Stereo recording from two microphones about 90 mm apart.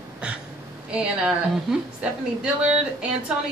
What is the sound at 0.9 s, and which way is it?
A woman's voice, 10° right (ahead or behind).